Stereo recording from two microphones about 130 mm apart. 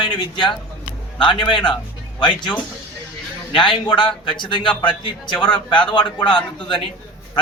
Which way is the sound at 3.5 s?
35° left (ahead or behind).